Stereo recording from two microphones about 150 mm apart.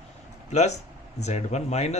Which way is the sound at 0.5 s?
50° left (ahead or behind).